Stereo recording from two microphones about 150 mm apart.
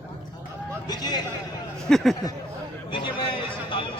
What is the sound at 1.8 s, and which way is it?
Speech, centre (ahead or behind).